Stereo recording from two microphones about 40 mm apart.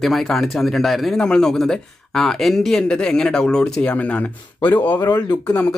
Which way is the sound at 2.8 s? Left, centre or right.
Left.